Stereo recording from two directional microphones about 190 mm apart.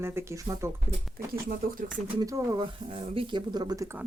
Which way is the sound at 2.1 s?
20° right (ahead or behind).